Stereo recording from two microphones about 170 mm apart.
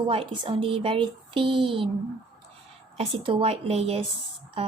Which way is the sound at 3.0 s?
35° right (ahead or behind).